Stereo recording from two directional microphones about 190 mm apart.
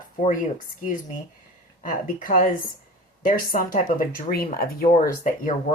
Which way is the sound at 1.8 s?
45° left (ahead or behind).